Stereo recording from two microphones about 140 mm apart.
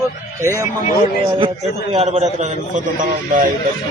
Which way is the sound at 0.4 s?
20° right (ahead or behind).